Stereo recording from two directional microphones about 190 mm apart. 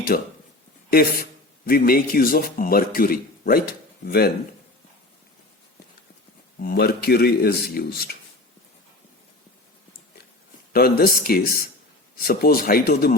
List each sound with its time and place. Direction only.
0.1 s a man's voice: 50° left (ahead or behind)
6.6 s a man's voice: 55° left (ahead or behind)
10.7 s a man's voice: 55° left (ahead or behind)